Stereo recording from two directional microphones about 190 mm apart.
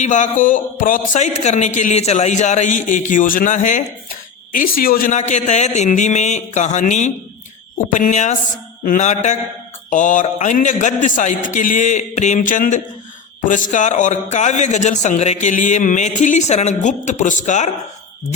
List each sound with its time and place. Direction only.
0.0 s a man's voice: 40° left (ahead or behind)